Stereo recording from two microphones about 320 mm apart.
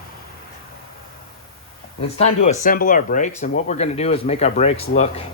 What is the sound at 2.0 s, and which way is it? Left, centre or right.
Speech, centre.